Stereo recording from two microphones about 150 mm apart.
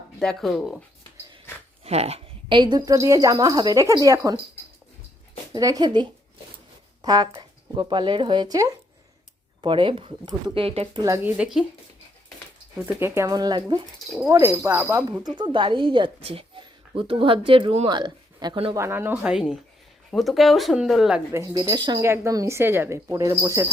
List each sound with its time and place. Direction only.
0.2 s speech: 5° left (ahead or behind)
1.8 s speech: 45° right (ahead or behind); by 4.4 s 20° right (ahead or behind)
5.5 s speech: 25° right (ahead or behind)
11.0 s speech: 20° right (ahead or behind)
11.3 s speech: centre (ahead or behind)
12.8 s speech: 15° right (ahead or behind)
14.4 s speech: 15° right (ahead or behind)
15.2 s speech: 30° right (ahead or behind)
18.7 s speech: 15° right (ahead or behind)
21.3 s speech: 25° right (ahead or behind)
22.0 s speech: 20° right (ahead or behind)